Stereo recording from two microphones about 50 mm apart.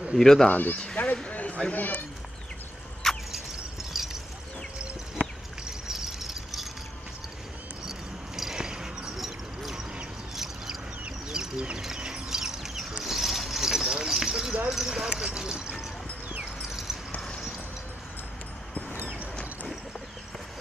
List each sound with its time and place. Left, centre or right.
0.2 s speech: centre
0.5 s speech: left
1.0 s a sound: left
1.7 s speech: left
3.0 s a sound: centre
5.7 s vehicle: centre
8.4 s basketball bounce: centre
10.3 s mouse: centre
11.2 s a sound: centre
11.8 s clip-clop: centre
13.0 s vehicle: centre
14.7 s clip-clop: centre
16.6 s a sound: centre